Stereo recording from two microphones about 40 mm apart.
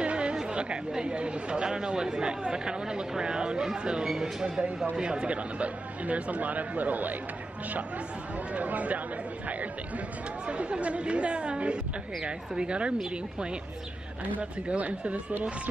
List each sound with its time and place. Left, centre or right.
0.0 s chatter: right
0.4 s speech: right
8.5 s speech: right
10.4 s speech: right
14.7 s speech: right